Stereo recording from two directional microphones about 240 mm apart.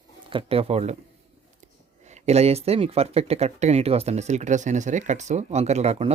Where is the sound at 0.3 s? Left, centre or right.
Right.